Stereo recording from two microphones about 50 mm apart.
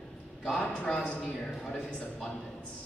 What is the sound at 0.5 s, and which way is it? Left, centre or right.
A woman's voice, centre.